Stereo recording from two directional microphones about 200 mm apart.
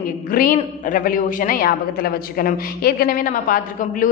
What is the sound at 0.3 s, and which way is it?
A man's voice, 45° left (ahead or behind).